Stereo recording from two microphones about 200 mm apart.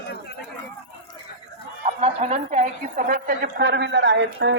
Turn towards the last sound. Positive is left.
turn(degrees=-60)  # may be behind; listen again after turning